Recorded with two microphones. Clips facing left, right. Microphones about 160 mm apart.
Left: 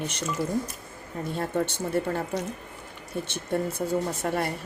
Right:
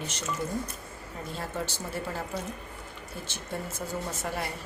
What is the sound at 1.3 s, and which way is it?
Speech, 60° left (ahead or behind).